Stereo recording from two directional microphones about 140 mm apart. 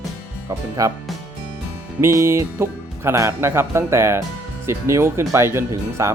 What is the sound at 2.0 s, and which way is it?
Speech, 20° right (ahead or behind).